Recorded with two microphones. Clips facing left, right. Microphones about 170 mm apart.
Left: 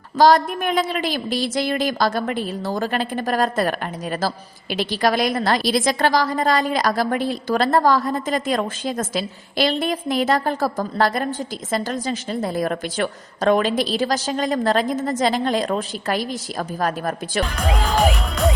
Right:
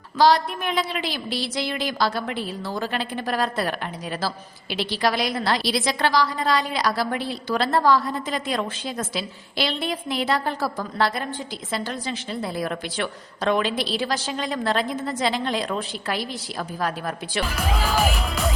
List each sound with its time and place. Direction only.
0.2 s a woman's voice: 45° left (ahead or behind)
17.4 s speech: 5° right (ahead or behind)